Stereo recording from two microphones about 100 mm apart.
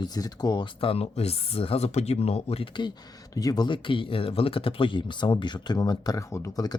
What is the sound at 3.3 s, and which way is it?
Speech, 40° left (ahead or behind).